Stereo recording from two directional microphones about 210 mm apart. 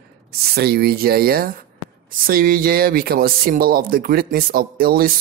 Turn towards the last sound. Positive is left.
turn(degrees=-45)  # may be behind; listen again after turning